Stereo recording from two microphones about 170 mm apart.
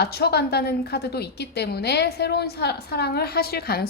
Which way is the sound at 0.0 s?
70° left (ahead or behind).